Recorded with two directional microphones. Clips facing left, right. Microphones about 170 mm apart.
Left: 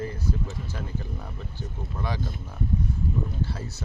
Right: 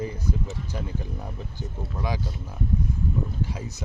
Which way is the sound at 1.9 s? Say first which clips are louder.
Right 2 dB; 10° right (ahead or behind).